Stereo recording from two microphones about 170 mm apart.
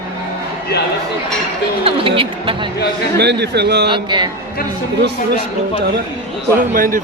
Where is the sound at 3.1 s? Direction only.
75° right (ahead or behind).